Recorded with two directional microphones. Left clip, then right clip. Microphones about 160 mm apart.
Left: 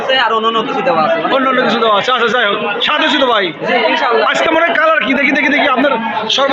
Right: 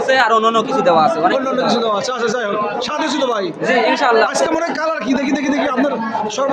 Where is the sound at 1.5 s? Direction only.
20° left (ahead or behind).